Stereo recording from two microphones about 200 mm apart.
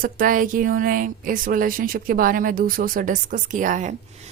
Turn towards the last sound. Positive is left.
turn(degrees=-40)  # may be behind; listen again after turning